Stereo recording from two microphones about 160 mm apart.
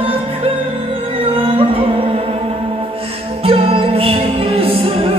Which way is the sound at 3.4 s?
35° right (ahead or behind).